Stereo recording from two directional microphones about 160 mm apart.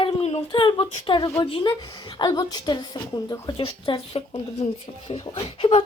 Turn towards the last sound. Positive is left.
turn(degrees=40)  # may be behind; listen again after turning